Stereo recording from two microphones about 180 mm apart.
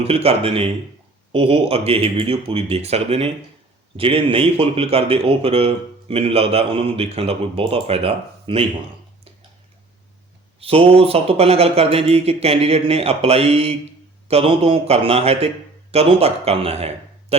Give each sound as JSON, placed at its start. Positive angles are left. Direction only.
{"t": 0.0, "sound": "speech", "side_deg": -35}
{"t": 10.6, "sound": "a man's voice", "side_deg": -30}